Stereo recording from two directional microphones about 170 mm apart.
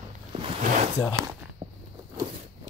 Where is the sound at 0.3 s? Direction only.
30° right (ahead or behind).